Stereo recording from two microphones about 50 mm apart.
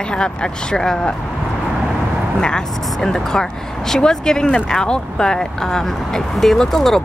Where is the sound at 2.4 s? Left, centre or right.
Centre.